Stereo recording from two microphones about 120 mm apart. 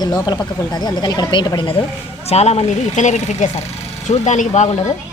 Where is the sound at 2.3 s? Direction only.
60° left (ahead or behind); by 4.6 s 75° left (ahead or behind).